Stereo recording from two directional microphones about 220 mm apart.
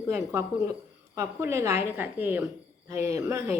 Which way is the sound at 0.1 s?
15° right (ahead or behind).